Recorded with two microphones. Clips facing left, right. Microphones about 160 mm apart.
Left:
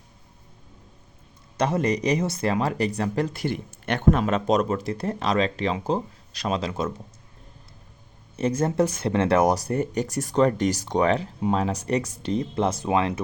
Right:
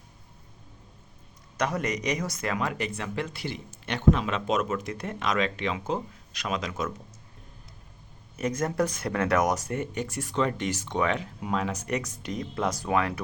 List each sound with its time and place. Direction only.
1.5 s speech: 30° left (ahead or behind)
8.4 s speech: 30° left (ahead or behind)